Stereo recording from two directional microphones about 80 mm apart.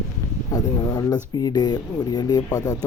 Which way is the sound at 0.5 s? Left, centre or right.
Left.